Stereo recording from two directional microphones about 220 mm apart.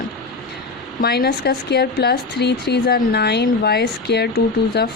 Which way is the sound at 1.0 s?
45° left (ahead or behind).